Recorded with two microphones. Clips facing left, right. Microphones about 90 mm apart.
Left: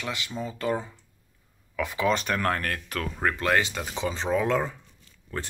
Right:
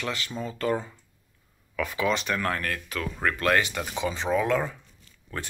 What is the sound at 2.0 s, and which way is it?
Speech, 40° left (ahead or behind).